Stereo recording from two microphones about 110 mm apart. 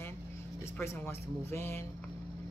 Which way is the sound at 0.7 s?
25° left (ahead or behind).